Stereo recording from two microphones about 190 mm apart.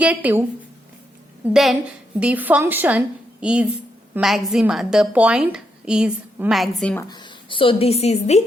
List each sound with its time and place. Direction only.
0.0 s speech: 10° right (ahead or behind)
2.1 s a woman's voice: 5° right (ahead or behind)
7.1 s speech: 25° left (ahead or behind)